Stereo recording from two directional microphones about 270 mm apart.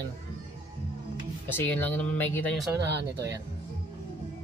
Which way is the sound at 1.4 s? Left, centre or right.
Centre.